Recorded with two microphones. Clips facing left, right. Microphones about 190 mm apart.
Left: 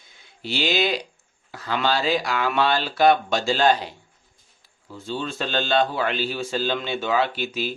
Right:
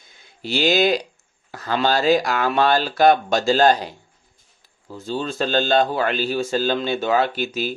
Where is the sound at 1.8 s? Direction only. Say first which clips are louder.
Right 5 dB; 45° right (ahead or behind).